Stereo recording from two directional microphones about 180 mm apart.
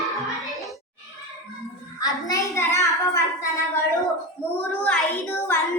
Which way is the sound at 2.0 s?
20° left (ahead or behind).